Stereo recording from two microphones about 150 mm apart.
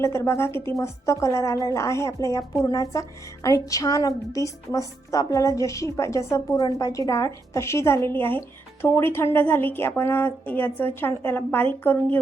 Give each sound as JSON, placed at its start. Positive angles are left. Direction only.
{"t": 0.0, "sound": "a woman's voice", "side_deg": 15}